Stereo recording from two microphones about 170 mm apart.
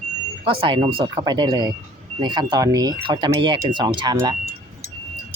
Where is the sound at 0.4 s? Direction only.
30° right (ahead or behind).